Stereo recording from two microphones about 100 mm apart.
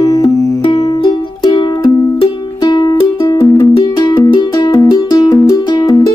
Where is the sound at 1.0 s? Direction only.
50° left (ahead or behind).